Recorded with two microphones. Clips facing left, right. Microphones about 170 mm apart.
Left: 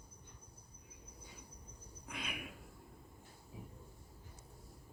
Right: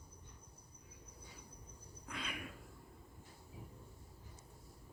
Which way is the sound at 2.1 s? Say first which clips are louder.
Even; 15° left (ahead or behind).